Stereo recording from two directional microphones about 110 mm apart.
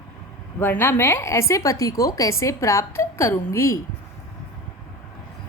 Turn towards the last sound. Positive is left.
turn(degrees=25)  # may be behind; listen again after turning